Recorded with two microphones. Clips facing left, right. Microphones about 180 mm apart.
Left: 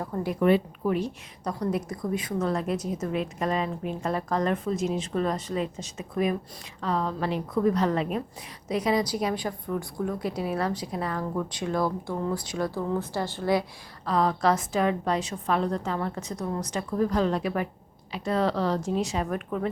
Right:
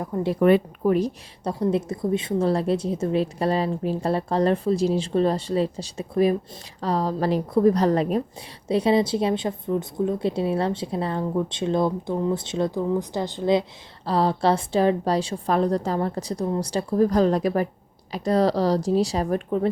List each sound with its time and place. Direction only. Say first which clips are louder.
0.0 s a woman's voice: right 5 dB; 25° right (ahead or behind)
0.3 s a woman's voice: right 4 dB; 50° right (ahead or behind)
0.9 s a woman's voice: right 6 dB; 40° right (ahead or behind)
1.5 s a woman's voice: right 6 dB; 25° right (ahead or behind)